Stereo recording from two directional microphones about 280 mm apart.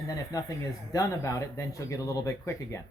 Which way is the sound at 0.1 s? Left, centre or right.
Centre.